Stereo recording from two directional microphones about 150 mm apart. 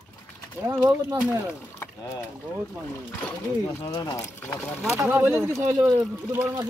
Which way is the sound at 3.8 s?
25° left (ahead or behind).